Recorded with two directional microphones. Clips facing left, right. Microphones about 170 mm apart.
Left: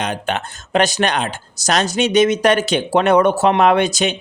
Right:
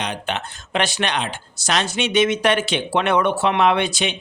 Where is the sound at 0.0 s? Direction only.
45° left (ahead or behind).